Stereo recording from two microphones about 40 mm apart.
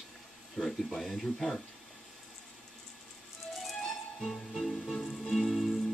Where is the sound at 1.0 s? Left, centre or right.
Centre.